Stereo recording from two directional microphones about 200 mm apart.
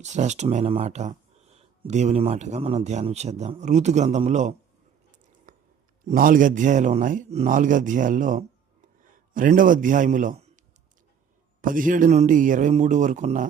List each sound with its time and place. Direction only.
0.0 s speech: 35° right (ahead or behind)
5.5 s a sound: 40° right (ahead or behind)
6.1 s a man's voice: 40° right (ahead or behind)
11.6 s speech: 40° right (ahead or behind)